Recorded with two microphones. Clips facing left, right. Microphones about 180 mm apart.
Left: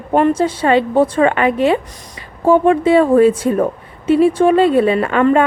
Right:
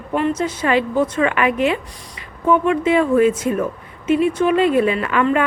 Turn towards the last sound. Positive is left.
turn(degrees=35)  # may be behind; listen again after turning